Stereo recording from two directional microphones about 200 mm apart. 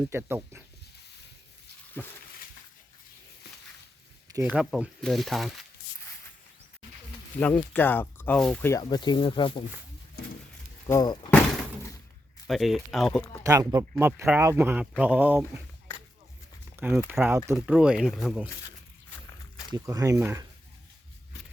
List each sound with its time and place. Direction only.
0.1 s speech: 10° right (ahead or behind)
2.0 s speech: 10° left (ahead or behind)
4.3 s speech: 15° right (ahead or behind)
4.5 s speech: 5° right (ahead or behind)
7.3 s speech: 5° left (ahead or behind); by 9.6 s 25° left (ahead or behind)
10.8 s speech: 15° left (ahead or behind)
11.3 s door: 10° left (ahead or behind)
12.5 s speech: centre (ahead or behind)
13.4 s speech: 15° right (ahead or behind)
16.7 s a sound: 10° right (ahead or behind)
17.1 s speech: 10° right (ahead or behind)
19.7 s speech: 15° right (ahead or behind)